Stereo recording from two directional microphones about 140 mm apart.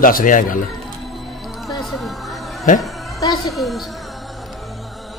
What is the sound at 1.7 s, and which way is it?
Music, centre (ahead or behind).